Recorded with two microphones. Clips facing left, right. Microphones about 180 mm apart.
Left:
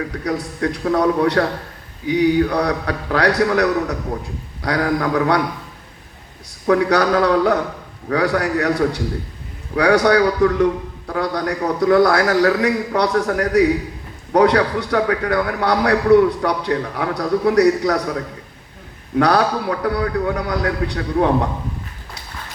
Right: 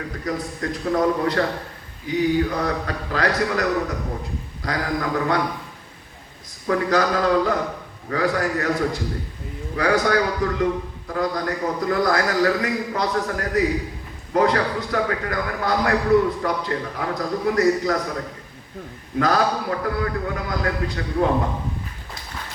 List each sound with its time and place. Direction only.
0.3 s a man's voice: 75° left (ahead or behind)
6.7 s a man's voice: 75° left (ahead or behind)
19.2 s a man's voice: 80° left